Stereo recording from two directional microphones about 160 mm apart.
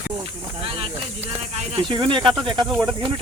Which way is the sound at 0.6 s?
35° right (ahead or behind).